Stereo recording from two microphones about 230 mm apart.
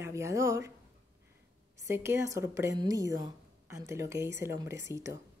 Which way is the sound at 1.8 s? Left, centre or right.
Centre.